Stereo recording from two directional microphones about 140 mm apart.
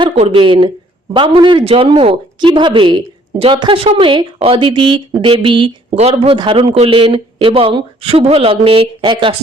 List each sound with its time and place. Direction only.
0.3 s a woman's voice: 35° right (ahead or behind)